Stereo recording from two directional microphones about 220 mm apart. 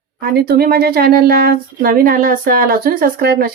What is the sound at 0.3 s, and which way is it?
Speech, 45° right (ahead or behind).